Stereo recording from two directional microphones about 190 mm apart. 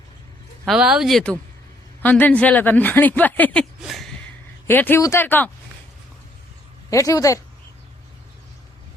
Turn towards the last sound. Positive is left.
turn(degrees=20)  # may be behind; listen again after turning